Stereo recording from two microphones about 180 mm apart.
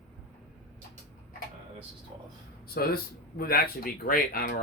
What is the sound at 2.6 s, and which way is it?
Speech, 55° left (ahead or behind).